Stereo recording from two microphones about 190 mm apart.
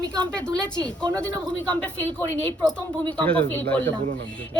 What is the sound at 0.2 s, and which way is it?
A woman's voice, 5° left (ahead or behind).